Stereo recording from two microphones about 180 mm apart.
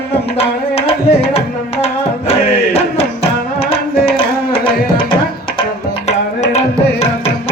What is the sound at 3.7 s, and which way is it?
Tabla, 30° left (ahead or behind).